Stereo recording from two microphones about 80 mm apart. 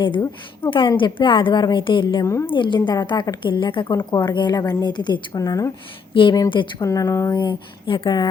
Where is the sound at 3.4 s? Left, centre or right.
Left.